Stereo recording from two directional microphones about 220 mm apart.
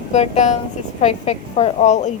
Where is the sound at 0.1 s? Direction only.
30° left (ahead or behind).